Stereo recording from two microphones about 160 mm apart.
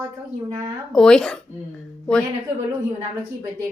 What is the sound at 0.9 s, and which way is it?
Speech, 5° left (ahead or behind).